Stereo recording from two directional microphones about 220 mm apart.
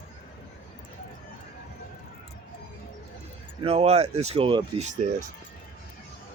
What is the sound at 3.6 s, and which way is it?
Speech, 30° right (ahead or behind).